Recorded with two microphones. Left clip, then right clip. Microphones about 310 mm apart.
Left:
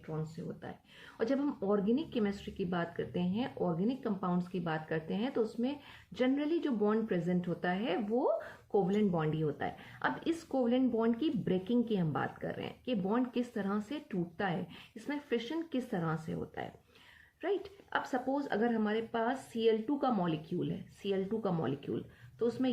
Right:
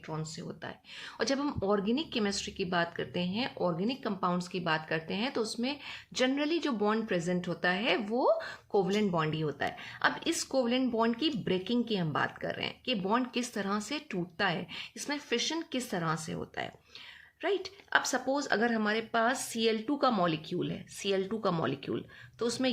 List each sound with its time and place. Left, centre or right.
0.2 s speech: right